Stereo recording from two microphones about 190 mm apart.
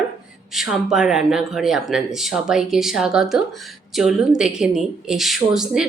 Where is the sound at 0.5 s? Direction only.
Centre (ahead or behind).